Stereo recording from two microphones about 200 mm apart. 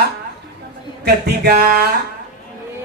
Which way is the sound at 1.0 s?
50° right (ahead or behind).